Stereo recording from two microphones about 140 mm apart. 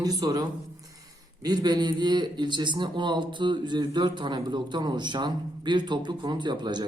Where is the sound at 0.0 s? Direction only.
30° right (ahead or behind).